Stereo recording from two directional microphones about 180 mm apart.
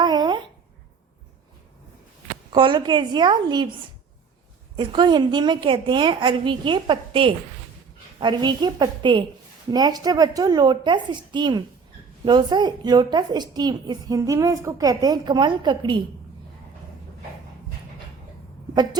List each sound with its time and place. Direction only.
0.0 s a sound: 25° right (ahead or behind)
2.5 s a woman's voice: 25° right (ahead or behind)
4.8 s a woman's voice: 25° right (ahead or behind)